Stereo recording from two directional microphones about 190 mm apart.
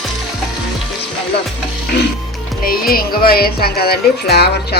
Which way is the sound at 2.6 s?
50° left (ahead or behind).